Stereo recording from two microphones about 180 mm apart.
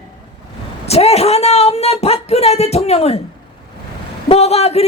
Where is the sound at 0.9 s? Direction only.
35° left (ahead or behind).